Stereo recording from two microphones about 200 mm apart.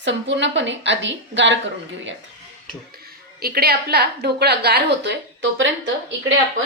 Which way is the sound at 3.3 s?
50° right (ahead or behind).